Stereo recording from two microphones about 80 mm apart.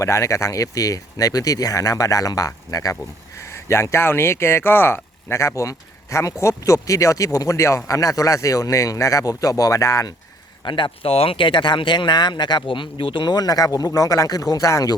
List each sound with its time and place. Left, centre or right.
0.0 s speech: left
3.7 s speech: left
10.7 s speech: left